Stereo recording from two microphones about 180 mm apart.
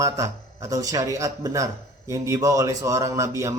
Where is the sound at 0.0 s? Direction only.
15° right (ahead or behind).